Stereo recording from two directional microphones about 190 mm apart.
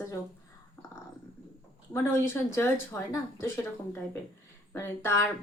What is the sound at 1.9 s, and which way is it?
Speech, 15° left (ahead or behind).